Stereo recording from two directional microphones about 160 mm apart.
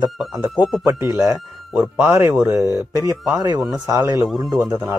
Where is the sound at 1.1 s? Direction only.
20° right (ahead or behind).